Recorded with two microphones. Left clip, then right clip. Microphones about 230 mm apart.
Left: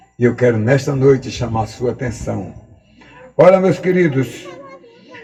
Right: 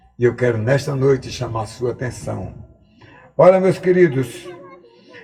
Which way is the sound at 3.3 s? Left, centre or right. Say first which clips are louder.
Left 2 dB; right.